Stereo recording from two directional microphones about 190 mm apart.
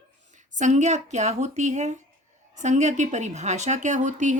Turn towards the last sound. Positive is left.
turn(degrees=-40)  # may be behind; listen again after turning